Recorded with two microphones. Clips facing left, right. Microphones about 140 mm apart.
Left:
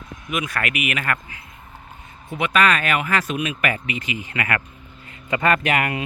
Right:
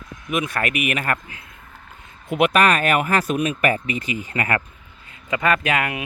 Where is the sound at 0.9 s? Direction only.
35° right (ahead or behind).